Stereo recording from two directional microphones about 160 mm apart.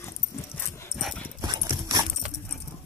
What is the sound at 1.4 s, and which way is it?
Clip-clop, 25° right (ahead or behind).